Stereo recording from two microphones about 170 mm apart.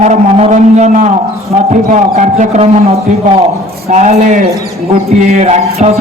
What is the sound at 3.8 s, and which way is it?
A man's voice, 40° right (ahead or behind).